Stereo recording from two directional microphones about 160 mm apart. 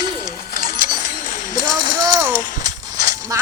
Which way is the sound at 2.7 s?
25° right (ahead or behind).